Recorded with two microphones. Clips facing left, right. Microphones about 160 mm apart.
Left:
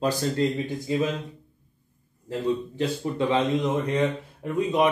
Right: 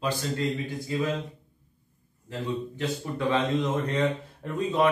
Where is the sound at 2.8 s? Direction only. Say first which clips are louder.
Left 4 dB; 15° left (ahead or behind).